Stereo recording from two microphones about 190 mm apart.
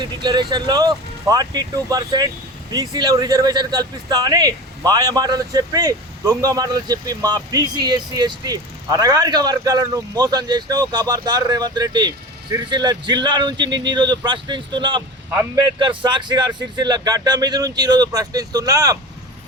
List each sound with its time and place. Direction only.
0.0 s speech: 25° right (ahead or behind)
16.0 s speech: 25° right (ahead or behind)